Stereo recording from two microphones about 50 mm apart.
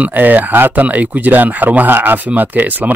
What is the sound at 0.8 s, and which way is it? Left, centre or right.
Speech, right.